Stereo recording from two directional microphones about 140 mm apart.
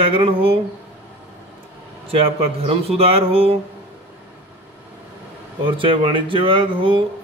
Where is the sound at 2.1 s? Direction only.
45° right (ahead or behind).